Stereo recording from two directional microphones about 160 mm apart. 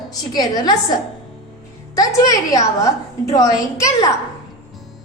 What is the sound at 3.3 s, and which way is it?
Speech, 20° left (ahead or behind).